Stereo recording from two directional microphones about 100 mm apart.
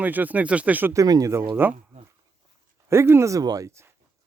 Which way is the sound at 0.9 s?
40° right (ahead or behind).